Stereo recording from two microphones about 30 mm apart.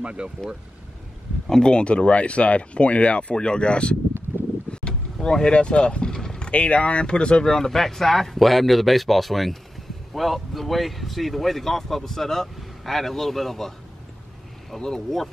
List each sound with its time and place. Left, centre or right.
0.0 s speech: right
1.7 s speech: left
3.3 s speech: left
4.6 s a sound: left
5.5 s speech: left
6.1 s vehicle: centre
6.5 s speech: left
7.4 s speech: centre
14.8 s speech: centre